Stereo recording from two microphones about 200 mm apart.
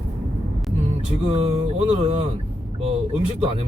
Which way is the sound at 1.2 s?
35° right (ahead or behind).